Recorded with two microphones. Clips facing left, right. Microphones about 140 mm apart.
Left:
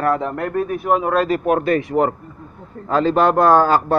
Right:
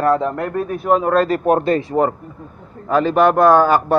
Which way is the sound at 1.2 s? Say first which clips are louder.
Right 2 dB; 40° right (ahead or behind).